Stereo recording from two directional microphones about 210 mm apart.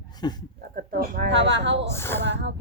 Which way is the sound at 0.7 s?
45° right (ahead or behind).